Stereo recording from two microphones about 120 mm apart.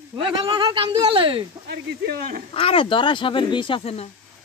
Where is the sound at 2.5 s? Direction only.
50° left (ahead or behind).